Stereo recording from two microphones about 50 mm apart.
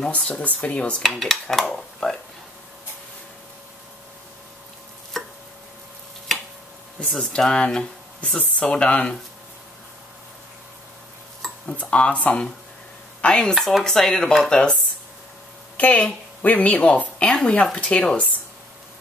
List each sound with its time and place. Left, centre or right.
0.1 s a woman's voice: left
1.0 s dishes: centre
5.1 s a sound: centre
7.2 s speech: centre
8.2 s a woman's voice: left
11.7 s a woman's voice: left
13.6 s dishes: centre
13.8 s speech: centre
15.8 s a woman's voice: left